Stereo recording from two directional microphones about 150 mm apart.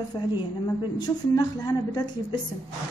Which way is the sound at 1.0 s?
30° left (ahead or behind).